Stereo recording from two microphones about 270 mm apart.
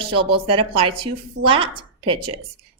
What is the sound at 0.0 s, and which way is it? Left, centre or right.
A woman's voice, centre.